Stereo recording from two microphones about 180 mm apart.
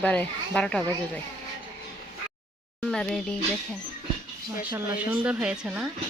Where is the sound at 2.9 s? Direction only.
5° left (ahead or behind).